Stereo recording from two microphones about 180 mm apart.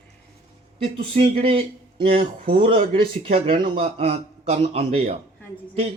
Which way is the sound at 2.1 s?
50° right (ahead or behind).